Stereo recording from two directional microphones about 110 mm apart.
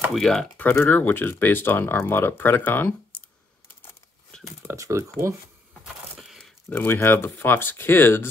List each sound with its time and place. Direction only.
0.1 s speech: centre (ahead or behind)
0.6 s speech: 15° left (ahead or behind)
4.6 s speech: 30° right (ahead or behind)
6.1 s a sound: centre (ahead or behind)
6.7 s speech: 15° left (ahead or behind)